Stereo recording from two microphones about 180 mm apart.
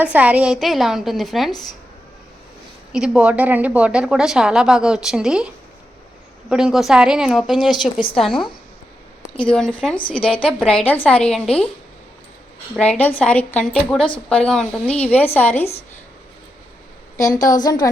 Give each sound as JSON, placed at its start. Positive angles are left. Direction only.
{"t": 0.0, "sound": "a woman's voice", "side_deg": -10}
{"t": 2.9, "sound": "a woman's voice", "side_deg": -5}
{"t": 6.5, "sound": "a woman's voice", "side_deg": -5}
{"t": 10.2, "sound": "a woman's voice", "side_deg": 30}
{"t": 10.7, "sound": "a woman's voice", "side_deg": 5}
{"t": 12.8, "sound": "a woman's voice", "side_deg": 5}
{"t": 17.2, "sound": "a woman's voice", "side_deg": 20}